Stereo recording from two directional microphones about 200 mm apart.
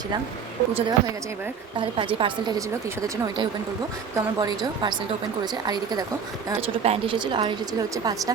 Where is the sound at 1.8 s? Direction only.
25° right (ahead or behind).